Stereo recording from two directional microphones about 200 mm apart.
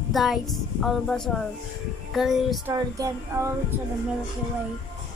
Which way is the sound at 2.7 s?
15° right (ahead or behind).